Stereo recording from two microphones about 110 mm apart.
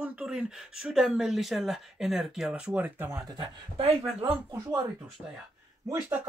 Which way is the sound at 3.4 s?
55° right (ahead or behind).